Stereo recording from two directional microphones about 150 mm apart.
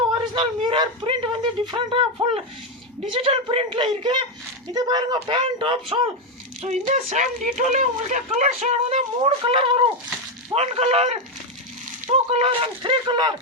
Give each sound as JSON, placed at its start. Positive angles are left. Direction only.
{"t": 0.1, "sound": "speech", "side_deg": -35}
{"t": 6.6, "sound": "speech", "side_deg": -50}